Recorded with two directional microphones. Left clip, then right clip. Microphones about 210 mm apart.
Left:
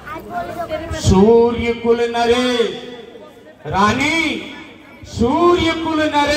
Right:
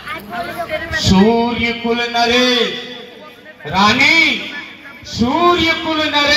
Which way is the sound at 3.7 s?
65° left (ahead or behind).